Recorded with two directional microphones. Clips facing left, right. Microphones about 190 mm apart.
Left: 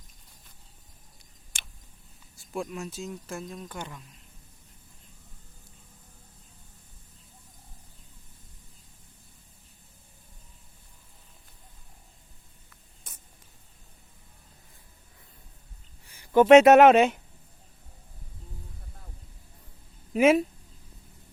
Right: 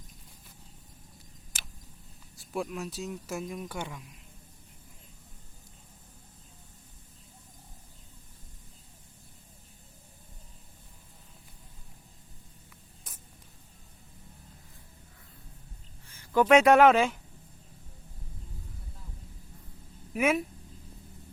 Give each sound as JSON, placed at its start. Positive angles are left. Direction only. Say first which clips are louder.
{"t": 1.5, "sound": "tick", "louder": "even", "side_deg": -5}
{"t": 2.3, "sound": "speech", "louder": "even", "side_deg": 0}
{"t": 13.1, "sound": "spray", "louder": "left 1 dB", "side_deg": 0}
{"t": 16.0, "sound": "a sound", "louder": "left 1 dB", "side_deg": 15}
{"t": 16.3, "sound": "speech", "louder": "left 6 dB", "side_deg": 25}
{"t": 20.1, "sound": "speech", "louder": "left 7 dB", "side_deg": 30}